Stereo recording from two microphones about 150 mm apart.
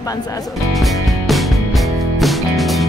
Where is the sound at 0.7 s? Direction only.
Centre (ahead or behind).